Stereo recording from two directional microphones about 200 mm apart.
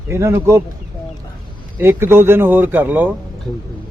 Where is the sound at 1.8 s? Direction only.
10° right (ahead or behind).